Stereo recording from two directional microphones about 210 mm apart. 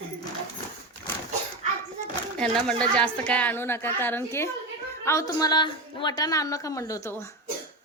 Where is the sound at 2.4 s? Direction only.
5° left (ahead or behind).